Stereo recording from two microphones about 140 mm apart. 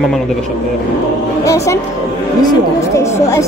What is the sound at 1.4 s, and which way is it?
A woman's voice, 20° left (ahead or behind).